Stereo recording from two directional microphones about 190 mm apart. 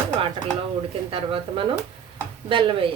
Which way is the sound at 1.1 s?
30° right (ahead or behind).